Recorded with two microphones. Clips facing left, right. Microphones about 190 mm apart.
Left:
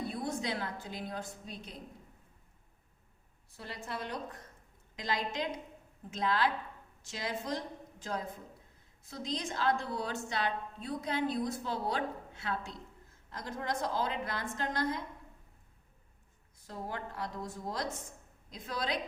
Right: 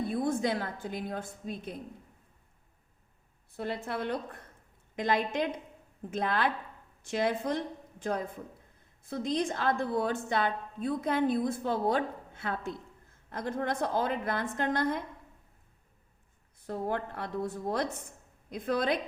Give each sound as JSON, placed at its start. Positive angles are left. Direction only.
{"t": 0.0, "sound": "a woman's voice", "side_deg": -50}
{"t": 3.5, "sound": "a woman's voice", "side_deg": -55}
{"t": 16.6, "sound": "a woman's voice", "side_deg": -60}